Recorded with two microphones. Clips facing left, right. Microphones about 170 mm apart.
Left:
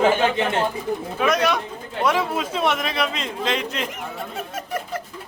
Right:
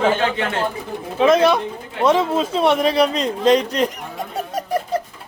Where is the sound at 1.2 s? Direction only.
25° right (ahead or behind).